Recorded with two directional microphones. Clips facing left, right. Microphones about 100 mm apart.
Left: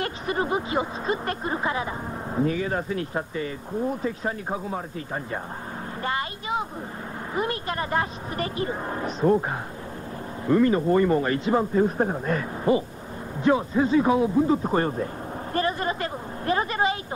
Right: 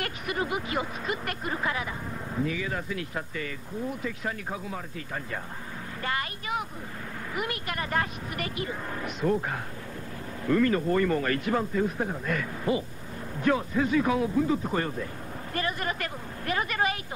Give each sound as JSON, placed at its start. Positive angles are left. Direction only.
{"t": 0.0, "sound": "a man's voice", "side_deg": 30}
{"t": 11.8, "sound": "a man's voice", "side_deg": 35}